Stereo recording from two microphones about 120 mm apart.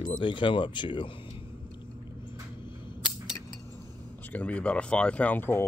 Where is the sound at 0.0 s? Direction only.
40° left (ahead or behind).